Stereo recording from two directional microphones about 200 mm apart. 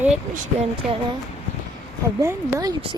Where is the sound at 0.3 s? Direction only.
35° right (ahead or behind).